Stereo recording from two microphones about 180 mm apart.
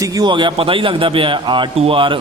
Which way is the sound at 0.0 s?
20° right (ahead or behind).